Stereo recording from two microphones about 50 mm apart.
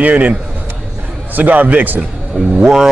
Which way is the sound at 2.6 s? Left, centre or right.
Centre.